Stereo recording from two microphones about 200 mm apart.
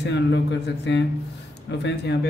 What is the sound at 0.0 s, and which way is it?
A man's voice, 60° left (ahead or behind).